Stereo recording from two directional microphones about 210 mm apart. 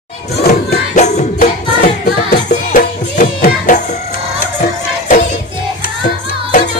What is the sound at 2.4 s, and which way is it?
Music, 40° left (ahead or behind).